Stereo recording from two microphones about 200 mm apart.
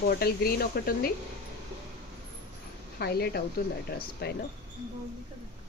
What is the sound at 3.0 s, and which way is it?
Speech, 50° left (ahead or behind).